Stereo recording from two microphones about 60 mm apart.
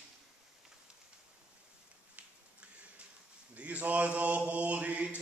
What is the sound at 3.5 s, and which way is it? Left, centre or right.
Mantra, right.